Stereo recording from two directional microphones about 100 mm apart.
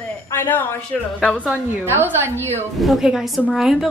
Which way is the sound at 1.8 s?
20° right (ahead or behind).